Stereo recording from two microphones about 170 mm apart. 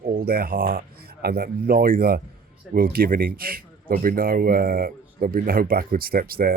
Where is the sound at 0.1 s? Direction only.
60° right (ahead or behind).